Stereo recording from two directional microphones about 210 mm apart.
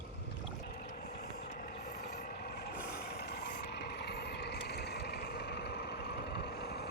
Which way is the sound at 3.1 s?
50° left (ahead or behind).